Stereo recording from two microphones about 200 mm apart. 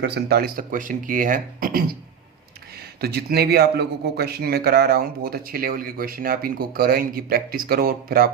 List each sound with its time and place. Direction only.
0.0 s a man's voice: 55° right (ahead or behind)
3.0 s a man's voice: 50° right (ahead or behind)